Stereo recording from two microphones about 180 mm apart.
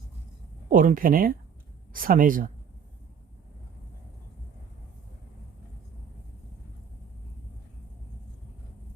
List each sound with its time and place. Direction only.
0.7 s speech: 50° right (ahead or behind)